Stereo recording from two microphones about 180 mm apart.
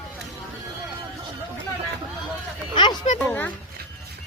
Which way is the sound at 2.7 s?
30° left (ahead or behind).